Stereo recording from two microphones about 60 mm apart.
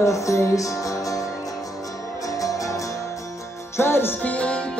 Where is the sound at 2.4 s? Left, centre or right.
Left.